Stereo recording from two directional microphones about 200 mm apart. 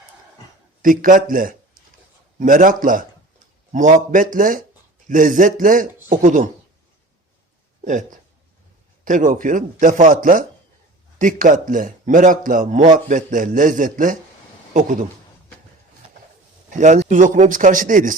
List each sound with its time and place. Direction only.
0.8 s a man's voice: 40° right (ahead or behind)
7.9 s a man's voice: 40° right (ahead or behind)
16.7 s a man's voice: 35° right (ahead or behind)